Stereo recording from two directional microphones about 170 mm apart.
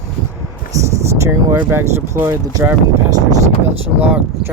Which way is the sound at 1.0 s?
20° right (ahead or behind).